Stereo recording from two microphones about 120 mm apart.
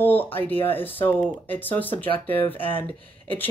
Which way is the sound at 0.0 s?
15° left (ahead or behind).